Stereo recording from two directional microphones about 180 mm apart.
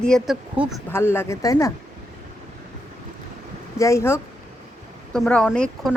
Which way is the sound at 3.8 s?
15° left (ahead or behind).